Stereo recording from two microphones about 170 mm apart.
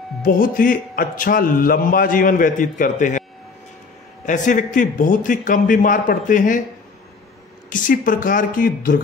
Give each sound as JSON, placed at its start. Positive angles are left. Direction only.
{"t": 0.2, "sound": "a man's voice", "side_deg": 55}
{"t": 4.3, "sound": "speech", "side_deg": 50}
{"t": 7.7, "sound": "speech", "side_deg": 50}